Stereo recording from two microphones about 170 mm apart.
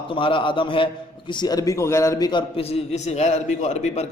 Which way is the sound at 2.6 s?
35° left (ahead or behind).